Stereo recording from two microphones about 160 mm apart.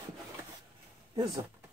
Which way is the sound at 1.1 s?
30° right (ahead or behind).